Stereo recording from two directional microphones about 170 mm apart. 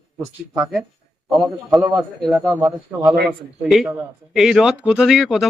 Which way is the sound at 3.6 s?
5° right (ahead or behind).